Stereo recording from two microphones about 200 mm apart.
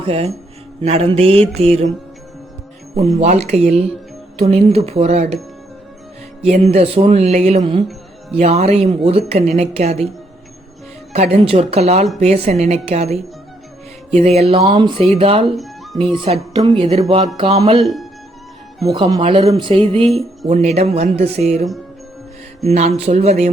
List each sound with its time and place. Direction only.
0.0 s speech: 30° right (ahead or behind)
2.9 s speech: 30° right (ahead or behind)
6.4 s speech: 30° right (ahead or behind)
11.1 s speech: 30° right (ahead or behind)
15.5 s cat: centre (ahead or behind)
16.1 s speech: 30° right (ahead or behind)